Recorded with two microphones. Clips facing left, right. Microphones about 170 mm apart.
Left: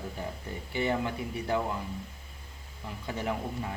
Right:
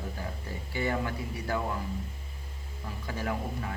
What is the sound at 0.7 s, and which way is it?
Speech, 20° left (ahead or behind).